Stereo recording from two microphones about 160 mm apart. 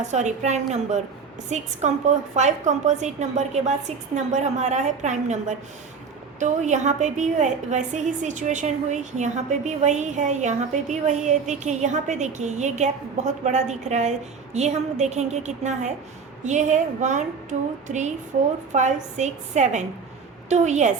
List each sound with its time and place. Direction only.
0.0 s a woman's voice: 45° right (ahead or behind)